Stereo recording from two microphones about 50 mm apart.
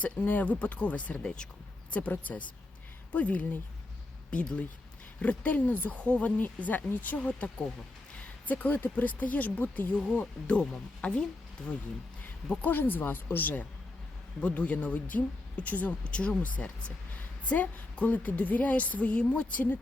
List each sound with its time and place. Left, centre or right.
0.0 s a woman's voice: left
5.2 s a woman's voice: left
10.0 s speech: left
12.6 s a woman's voice: left
14.4 s a woman's voice: left